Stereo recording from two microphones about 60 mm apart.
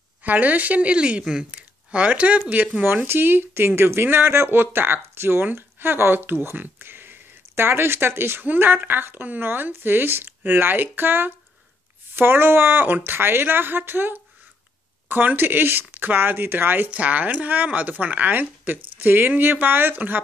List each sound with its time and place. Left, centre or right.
0.2 s a woman's voice: right
2.8 s speech: right